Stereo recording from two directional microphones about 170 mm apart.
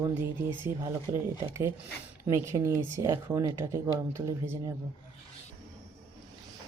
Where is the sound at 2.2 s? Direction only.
15° right (ahead or behind).